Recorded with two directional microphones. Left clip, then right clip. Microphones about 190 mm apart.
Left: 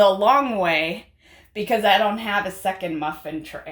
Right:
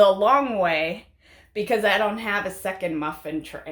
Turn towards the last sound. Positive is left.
turn(degrees=-25)  # may be behind; listen again after turning